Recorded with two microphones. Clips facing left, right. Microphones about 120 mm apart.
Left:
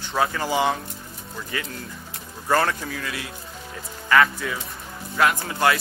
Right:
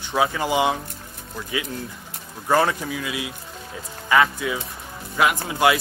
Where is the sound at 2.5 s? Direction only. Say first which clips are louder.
Right 2 dB; 10° right (ahead or behind).